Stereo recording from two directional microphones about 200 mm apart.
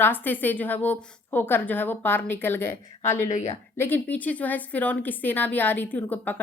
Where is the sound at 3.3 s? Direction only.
35° left (ahead or behind).